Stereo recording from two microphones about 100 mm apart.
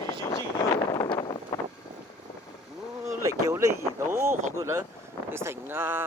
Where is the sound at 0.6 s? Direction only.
35° left (ahead or behind).